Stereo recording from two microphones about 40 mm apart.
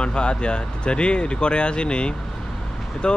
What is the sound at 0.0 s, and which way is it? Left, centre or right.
Speech, left.